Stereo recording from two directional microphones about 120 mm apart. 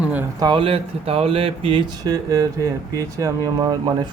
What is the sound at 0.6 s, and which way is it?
A man's voice, 55° right (ahead or behind).